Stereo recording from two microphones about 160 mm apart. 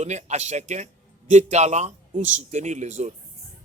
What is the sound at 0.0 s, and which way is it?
Speech, 45° right (ahead or behind).